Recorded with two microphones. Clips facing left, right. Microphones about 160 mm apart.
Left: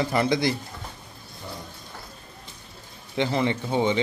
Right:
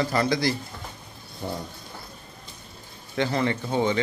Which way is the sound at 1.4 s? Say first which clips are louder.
Right 7 dB; 35° right (ahead or behind).